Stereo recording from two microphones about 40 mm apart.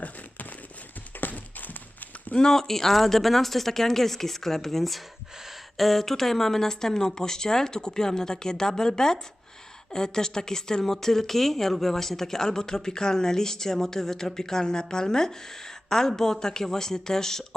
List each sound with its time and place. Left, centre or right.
1.2 s clip-clop: left
2.5 s speech: centre